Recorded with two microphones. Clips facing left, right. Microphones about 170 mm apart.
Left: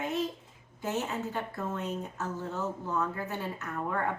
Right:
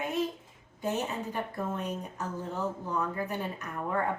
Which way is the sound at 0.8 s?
15° right (ahead or behind).